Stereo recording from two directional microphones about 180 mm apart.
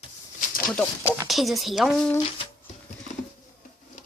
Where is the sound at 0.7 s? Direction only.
5° left (ahead or behind).